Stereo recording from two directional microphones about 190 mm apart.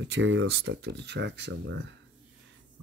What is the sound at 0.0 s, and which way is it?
Speech, 70° right (ahead or behind).